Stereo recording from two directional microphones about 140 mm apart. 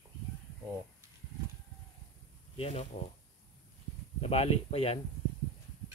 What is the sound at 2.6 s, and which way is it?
Speech, 45° left (ahead or behind).